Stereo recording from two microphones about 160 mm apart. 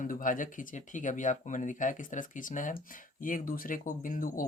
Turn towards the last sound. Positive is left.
turn(degrees=60)  # may be behind; listen again after turning